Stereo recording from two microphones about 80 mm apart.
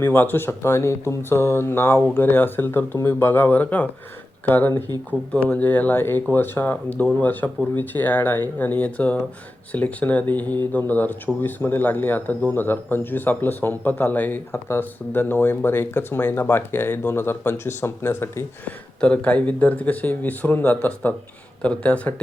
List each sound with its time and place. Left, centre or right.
0.0 s speech: left
18.6 s speech: centre